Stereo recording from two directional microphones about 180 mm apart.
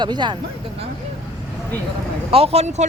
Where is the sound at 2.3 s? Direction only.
35° right (ahead or behind).